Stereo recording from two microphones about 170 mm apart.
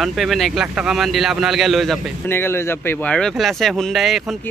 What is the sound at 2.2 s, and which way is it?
Speech, 15° left (ahead or behind).